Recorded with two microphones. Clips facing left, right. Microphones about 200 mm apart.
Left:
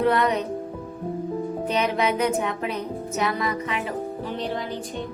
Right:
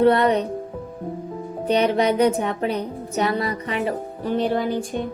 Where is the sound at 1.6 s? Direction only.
35° right (ahead or behind); by 5.0 s 50° right (ahead or behind).